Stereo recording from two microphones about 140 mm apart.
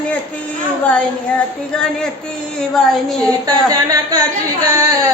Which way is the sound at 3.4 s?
25° right (ahead or behind).